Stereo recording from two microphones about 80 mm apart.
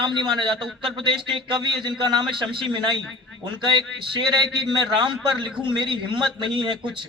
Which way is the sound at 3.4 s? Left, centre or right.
Right.